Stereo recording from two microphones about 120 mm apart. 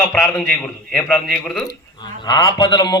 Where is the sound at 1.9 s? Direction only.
35° left (ahead or behind).